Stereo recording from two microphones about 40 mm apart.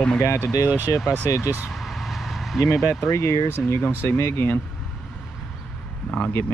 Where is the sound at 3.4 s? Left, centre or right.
Left.